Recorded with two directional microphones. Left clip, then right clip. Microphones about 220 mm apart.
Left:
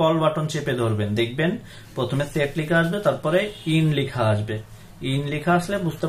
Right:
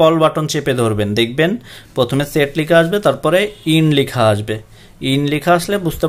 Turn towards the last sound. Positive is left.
turn(degrees=-45)  # may be behind; listen again after turning